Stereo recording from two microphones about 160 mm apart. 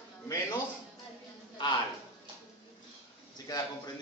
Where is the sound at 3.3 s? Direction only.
25° left (ahead or behind).